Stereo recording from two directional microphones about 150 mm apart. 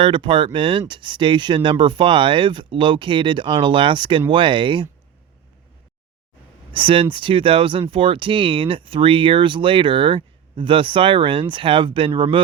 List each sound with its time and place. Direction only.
0.0 s speech: 35° right (ahead or behind)
6.7 s speech: 35° right (ahead or behind)